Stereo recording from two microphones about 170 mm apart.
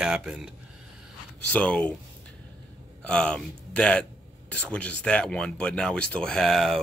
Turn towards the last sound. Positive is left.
turn(degrees=0)  # may be behind; listen again after turning